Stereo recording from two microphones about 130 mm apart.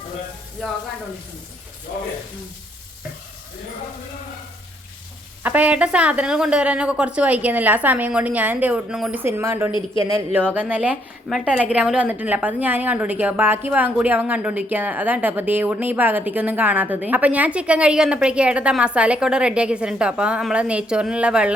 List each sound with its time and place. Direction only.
5.4 s a woman's voice: 10° right (ahead or behind)
9.2 s a woman's voice: 20° right (ahead or behind)